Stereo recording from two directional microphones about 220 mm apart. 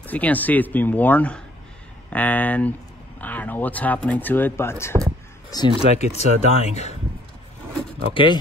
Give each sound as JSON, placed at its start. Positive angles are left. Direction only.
{"t": 0.0, "sound": "speech", "side_deg": 5}
{"t": 5.9, "sound": "speech", "side_deg": 30}
{"t": 8.1, "sound": "speech", "side_deg": 20}